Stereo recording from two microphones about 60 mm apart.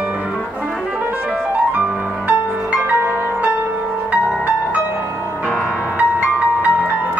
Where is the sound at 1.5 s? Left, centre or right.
Right.